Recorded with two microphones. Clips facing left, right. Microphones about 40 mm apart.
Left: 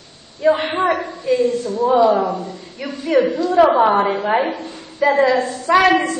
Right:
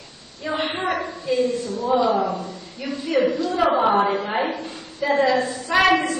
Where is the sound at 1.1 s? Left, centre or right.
Left.